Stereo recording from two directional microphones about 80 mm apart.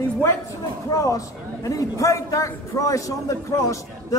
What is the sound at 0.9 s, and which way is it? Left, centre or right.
A man's voice, left.